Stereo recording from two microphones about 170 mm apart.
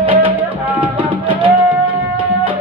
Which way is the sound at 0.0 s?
30° right (ahead or behind).